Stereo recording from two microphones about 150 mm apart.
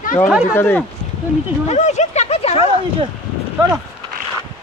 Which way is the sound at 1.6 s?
50° left (ahead or behind).